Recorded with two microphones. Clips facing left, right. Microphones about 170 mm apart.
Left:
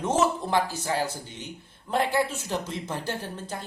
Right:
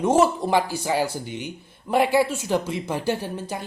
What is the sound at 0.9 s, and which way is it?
Speech, 70° right (ahead or behind).